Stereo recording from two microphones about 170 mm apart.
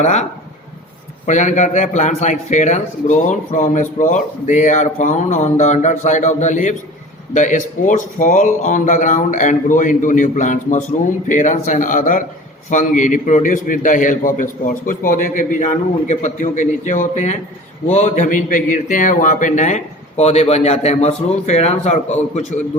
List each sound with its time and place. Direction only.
0.0 s speech: 40° left (ahead or behind)
1.3 s a man's voice: 45° left (ahead or behind)